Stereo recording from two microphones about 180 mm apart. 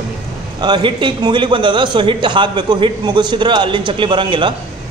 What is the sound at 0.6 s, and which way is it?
A man's voice, 25° right (ahead or behind).